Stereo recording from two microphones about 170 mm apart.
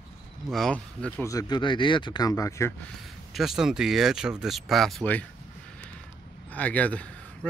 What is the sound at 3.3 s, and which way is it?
Speech, centre (ahead or behind).